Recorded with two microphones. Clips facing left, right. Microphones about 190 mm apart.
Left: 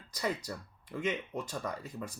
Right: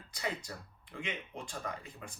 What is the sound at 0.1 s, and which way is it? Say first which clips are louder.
Speech: left 4 dB; 40° left (ahead or behind).